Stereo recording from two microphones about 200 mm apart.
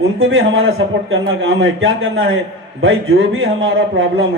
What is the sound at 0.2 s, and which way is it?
Speech, 90° right.